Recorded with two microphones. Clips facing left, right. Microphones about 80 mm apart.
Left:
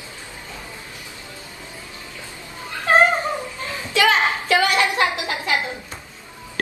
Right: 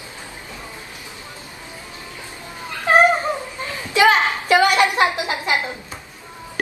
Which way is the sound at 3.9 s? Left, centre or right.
Right.